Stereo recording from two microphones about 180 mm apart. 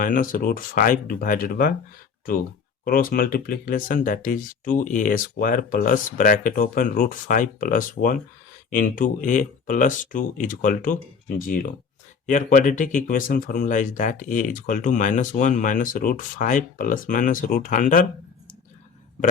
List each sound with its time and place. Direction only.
0.0 s speech: 50° left (ahead or behind)
2.8 s speech: 50° left (ahead or behind)